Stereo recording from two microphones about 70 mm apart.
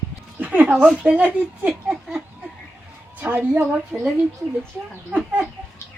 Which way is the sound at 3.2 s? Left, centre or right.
Right.